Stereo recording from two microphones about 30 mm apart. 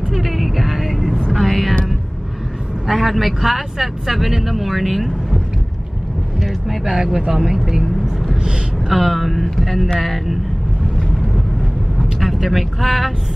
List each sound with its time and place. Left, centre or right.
0.1 s vehicle: centre
2.9 s speech: centre
6.9 s speech: centre
8.8 s speech: centre
12.2 s speech: centre